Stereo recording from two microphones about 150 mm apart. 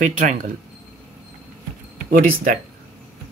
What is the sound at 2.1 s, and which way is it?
Speech, 65° right (ahead or behind).